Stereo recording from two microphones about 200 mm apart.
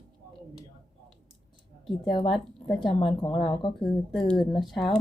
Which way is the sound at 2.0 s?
20° left (ahead or behind).